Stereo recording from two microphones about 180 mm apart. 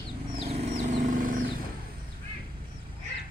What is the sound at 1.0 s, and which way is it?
Vehicle, 45° right (ahead or behind).